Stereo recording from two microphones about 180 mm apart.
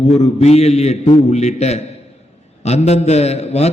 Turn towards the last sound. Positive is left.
turn(degrees=35)  # may be behind; listen again after turning